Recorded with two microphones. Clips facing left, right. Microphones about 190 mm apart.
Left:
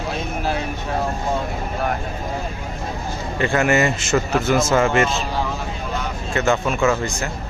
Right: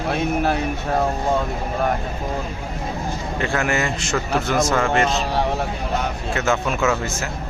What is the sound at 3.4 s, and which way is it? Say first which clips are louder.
A man's voice: left 5 dB; centre (ahead or behind).